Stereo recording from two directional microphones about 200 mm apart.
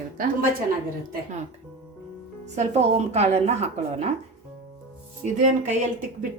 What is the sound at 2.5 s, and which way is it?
A woman's voice, 30° right (ahead or behind).